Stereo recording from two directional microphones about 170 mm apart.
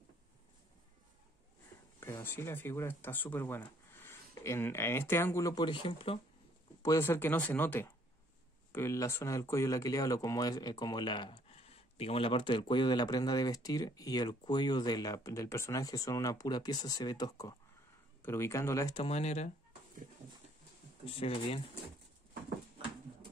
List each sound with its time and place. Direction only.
2.0 s speech: 15° left (ahead or behind)
6.8 s speech: 15° left (ahead or behind)
18.9 s speech: 35° left (ahead or behind)
21.0 s speech: 35° left (ahead or behind)